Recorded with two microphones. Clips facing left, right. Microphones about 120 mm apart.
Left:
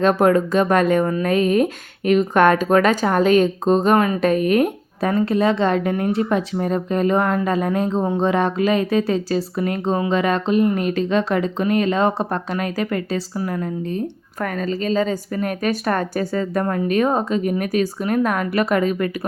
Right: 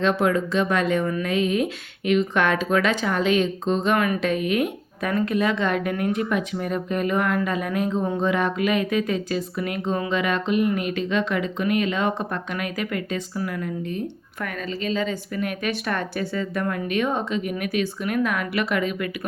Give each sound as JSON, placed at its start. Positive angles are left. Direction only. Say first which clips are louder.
{"t": 0.0, "sound": "speech", "louder": "left 5 dB", "side_deg": 45}
{"t": 5.1, "sound": "speech", "louder": "left 4 dB", "side_deg": 30}